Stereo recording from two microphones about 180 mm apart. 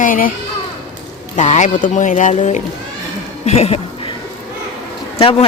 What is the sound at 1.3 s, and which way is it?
A man's voice, 40° left (ahead or behind).